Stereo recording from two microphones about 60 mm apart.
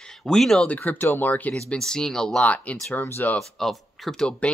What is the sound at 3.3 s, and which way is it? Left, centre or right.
Speech, centre.